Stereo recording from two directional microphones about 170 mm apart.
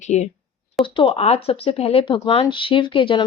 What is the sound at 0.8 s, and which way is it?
Speech, 30° left (ahead or behind).